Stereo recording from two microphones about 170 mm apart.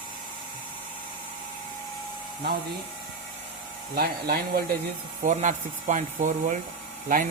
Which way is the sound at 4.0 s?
65° right (ahead or behind).